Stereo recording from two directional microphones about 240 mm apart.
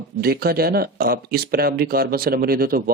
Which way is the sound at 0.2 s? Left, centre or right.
Right.